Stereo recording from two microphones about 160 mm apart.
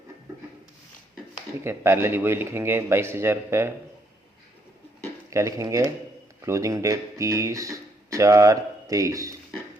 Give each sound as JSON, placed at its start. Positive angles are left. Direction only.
{"t": 1.6, "sound": "a man's voice", "side_deg": -15}
{"t": 5.3, "sound": "speech", "side_deg": -20}